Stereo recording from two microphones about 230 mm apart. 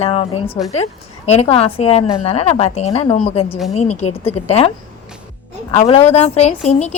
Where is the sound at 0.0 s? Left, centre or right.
Left.